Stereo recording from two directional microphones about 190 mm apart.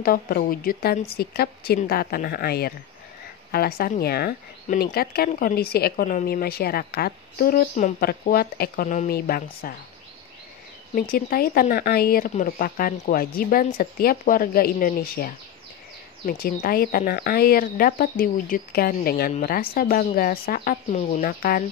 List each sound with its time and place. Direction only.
0.0 s a woman's voice: 50° left (ahead or behind)
11.0 s speech: 50° left (ahead or behind)
16.6 s speech: 50° left (ahead or behind)